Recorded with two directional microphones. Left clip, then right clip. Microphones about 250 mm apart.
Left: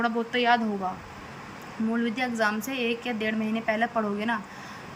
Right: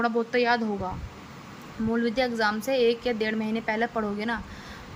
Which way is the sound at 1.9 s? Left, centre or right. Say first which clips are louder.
Right 4 dB; right.